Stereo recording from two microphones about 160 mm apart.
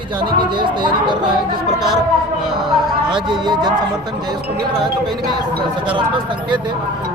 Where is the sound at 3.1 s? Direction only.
30° right (ahead or behind).